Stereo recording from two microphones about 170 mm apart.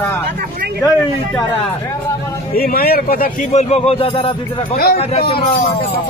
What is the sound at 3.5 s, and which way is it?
Speech, 40° left (ahead or behind).